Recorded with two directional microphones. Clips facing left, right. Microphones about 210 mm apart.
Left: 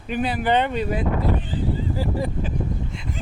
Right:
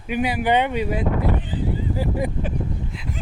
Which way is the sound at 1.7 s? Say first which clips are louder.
Right 1 dB; 20° right (ahead or behind).